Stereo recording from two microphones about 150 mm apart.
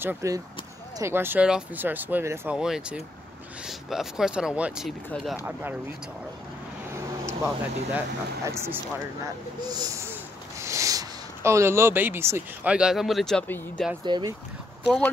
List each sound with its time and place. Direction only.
0.0 s speech: 15° right (ahead or behind); by 5.4 s centre (ahead or behind)
5.4 s speech: 15° right (ahead or behind)
7.2 s speech: 20° right (ahead or behind)
10.6 s a sound: 20° right (ahead or behind)
12.7 s speech: 5° right (ahead or behind)
14.0 s speech: 30° right (ahead or behind)